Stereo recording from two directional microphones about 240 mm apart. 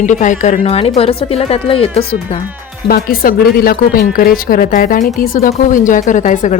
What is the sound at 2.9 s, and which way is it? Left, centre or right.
Speech, left.